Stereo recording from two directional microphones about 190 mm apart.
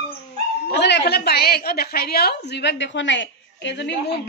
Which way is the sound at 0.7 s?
65° left (ahead or behind).